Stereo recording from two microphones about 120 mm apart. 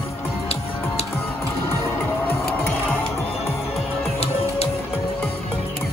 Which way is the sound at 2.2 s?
15° left (ahead or behind).